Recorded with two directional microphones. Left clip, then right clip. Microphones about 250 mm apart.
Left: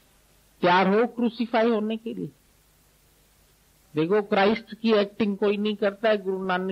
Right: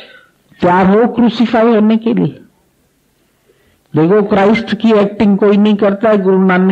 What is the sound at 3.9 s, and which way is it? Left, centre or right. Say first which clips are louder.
A man's voice: right 12 dB; left.